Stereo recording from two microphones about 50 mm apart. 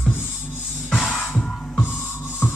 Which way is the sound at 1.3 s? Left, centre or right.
Centre.